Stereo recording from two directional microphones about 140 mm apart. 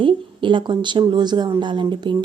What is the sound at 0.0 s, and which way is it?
A woman's voice, 35° right (ahead or behind).